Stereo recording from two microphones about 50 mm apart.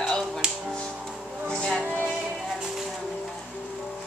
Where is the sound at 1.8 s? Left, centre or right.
Right.